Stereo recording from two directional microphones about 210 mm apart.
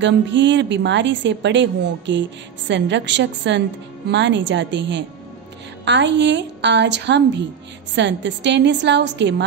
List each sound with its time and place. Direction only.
0.0 s a woman's voice: 60° right (ahead or behind)